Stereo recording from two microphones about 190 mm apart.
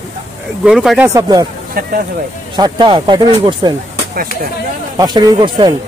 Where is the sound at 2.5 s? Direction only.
25° right (ahead or behind).